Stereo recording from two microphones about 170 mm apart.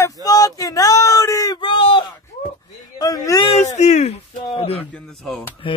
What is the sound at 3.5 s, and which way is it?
Speech, 40° left (ahead or behind).